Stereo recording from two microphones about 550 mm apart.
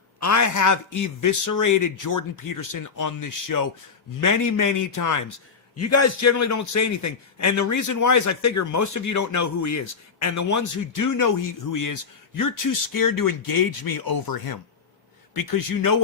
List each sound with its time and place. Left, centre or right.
0.2 s a man's voice: left